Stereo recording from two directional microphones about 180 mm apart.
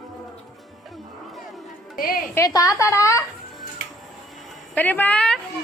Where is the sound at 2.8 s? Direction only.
15° left (ahead or behind).